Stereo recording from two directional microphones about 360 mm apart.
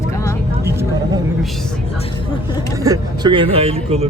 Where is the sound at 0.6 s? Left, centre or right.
Centre.